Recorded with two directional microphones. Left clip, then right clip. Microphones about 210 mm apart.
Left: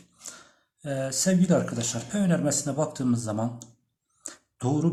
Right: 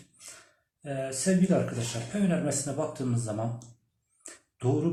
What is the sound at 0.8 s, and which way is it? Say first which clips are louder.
Speech: left 3 dB; 25° left (ahead or behind).